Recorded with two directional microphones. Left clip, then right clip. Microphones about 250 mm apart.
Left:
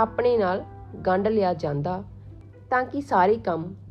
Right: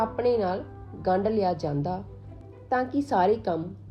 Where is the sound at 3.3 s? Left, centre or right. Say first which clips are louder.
Left 2 dB; left.